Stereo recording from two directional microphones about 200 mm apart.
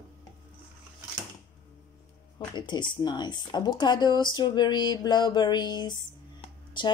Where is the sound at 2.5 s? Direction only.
20° left (ahead or behind).